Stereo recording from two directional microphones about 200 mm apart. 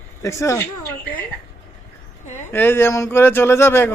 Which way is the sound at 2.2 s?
40° left (ahead or behind).